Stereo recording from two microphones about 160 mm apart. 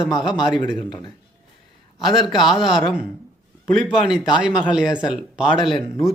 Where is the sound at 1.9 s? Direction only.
Centre (ahead or behind).